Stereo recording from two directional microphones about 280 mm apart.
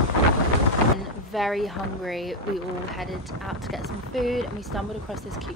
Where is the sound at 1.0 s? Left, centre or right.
Centre.